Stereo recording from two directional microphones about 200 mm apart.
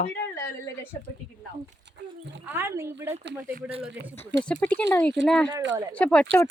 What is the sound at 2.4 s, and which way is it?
Speech, 10° right (ahead or behind).